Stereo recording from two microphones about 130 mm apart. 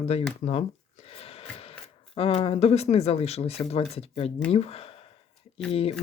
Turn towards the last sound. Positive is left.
turn(degrees=50)  # may be behind; listen again after turning